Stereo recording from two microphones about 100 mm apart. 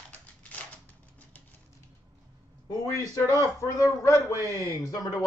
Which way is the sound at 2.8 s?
35° left (ahead or behind).